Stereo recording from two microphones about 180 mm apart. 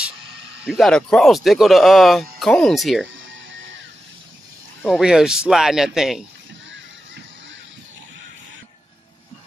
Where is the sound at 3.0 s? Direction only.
90° right.